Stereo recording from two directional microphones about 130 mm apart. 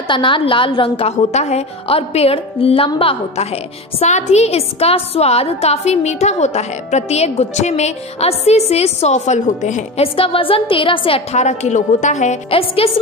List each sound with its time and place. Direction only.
0.1 s a woman's voice: 40° left (ahead or behind)
4.0 s a woman's voice: 55° left (ahead or behind)
10.1 s a woman's voice: 45° left (ahead or behind); by 12.4 s 65° left (ahead or behind)
12.4 s a woman's voice: 45° left (ahead or behind)